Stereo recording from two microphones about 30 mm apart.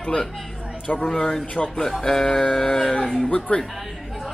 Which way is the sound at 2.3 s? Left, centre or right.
Left.